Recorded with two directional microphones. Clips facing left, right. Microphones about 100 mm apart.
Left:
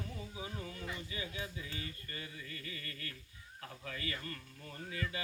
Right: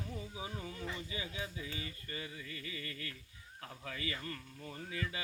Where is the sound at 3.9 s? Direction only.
20° right (ahead or behind).